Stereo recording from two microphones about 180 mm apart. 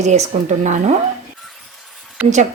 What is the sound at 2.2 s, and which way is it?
Speech, 5° right (ahead or behind).